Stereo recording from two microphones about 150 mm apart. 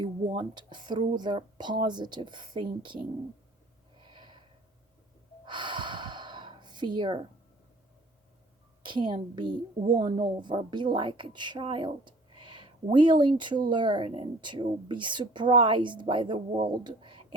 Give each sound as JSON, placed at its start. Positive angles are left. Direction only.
{"t": 0.0, "sound": "a woman's voice", "side_deg": -30}
{"t": 3.9, "sound": "snort", "side_deg": -30}
{"t": 5.5, "sound": "gasp", "side_deg": -30}
{"t": 8.8, "sound": "a woman's voice", "side_deg": -30}